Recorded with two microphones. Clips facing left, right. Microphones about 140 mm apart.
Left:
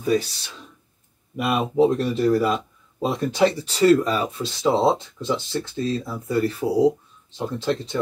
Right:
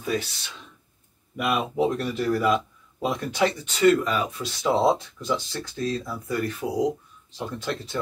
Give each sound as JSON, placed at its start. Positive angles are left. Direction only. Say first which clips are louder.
{"t": 1.4, "sound": "speech", "louder": "left 4 dB", "side_deg": 35}